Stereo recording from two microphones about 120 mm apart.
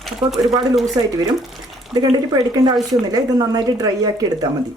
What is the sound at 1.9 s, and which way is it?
Speech, 35° right (ahead or behind).